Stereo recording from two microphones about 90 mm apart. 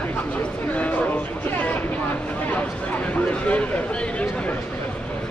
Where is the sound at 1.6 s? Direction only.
20° left (ahead or behind).